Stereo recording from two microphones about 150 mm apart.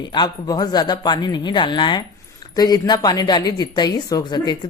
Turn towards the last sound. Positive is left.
turn(degrees=30)  # may be behind; listen again after turning